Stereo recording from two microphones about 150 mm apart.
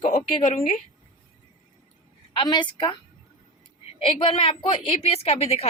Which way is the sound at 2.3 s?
35° left (ahead or behind).